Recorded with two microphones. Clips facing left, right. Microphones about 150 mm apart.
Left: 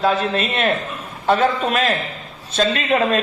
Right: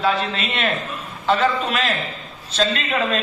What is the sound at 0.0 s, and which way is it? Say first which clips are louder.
A man's voice: left 3 dB; 45° left (ahead or behind).